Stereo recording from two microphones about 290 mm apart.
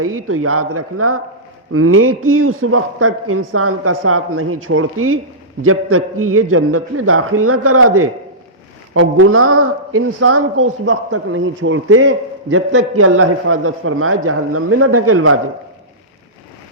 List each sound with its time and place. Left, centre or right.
0.0 s speech: right